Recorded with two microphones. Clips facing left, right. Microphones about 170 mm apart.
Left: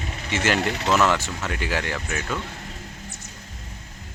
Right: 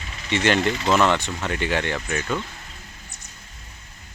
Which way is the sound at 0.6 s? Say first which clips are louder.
Right 3 dB; 65° left (ahead or behind).